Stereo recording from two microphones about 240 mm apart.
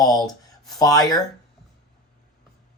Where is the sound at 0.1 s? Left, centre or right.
Centre.